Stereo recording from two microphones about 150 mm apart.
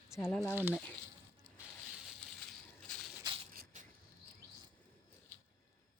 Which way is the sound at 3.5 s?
70° right (ahead or behind).